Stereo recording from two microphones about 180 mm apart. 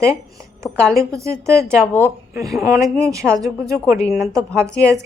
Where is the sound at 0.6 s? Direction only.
5° left (ahead or behind).